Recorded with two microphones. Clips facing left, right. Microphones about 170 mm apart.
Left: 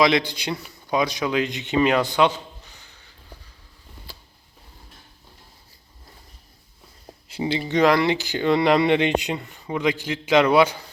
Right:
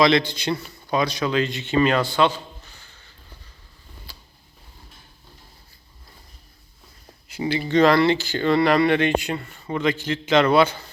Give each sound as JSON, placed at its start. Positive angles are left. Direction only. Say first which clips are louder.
{"t": 0.0, "sound": "a man's voice", "louder": "right 1 dB", "side_deg": 10}
{"t": 7.3, "sound": "a sound", "louder": "even", "side_deg": 30}
{"t": 7.7, "sound": "speech", "louder": "right 2 dB", "side_deg": 15}